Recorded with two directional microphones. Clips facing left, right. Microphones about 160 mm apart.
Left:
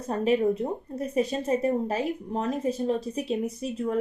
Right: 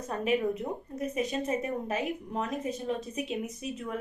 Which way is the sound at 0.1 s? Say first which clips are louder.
Left 5 dB; 35° left (ahead or behind).